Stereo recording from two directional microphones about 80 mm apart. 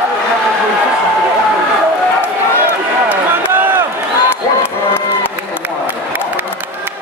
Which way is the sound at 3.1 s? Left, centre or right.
Right.